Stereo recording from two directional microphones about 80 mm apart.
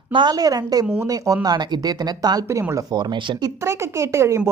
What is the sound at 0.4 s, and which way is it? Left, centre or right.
A woman's voice, right.